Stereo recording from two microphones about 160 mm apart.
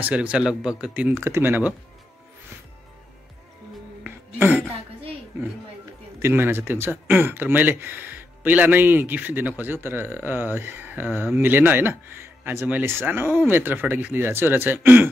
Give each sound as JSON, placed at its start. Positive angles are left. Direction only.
{"t": 0.0, "sound": "speech", "side_deg": -10}
{"t": 4.0, "sound": "throat clearing", "side_deg": -10}
{"t": 6.2, "sound": "speech", "side_deg": -15}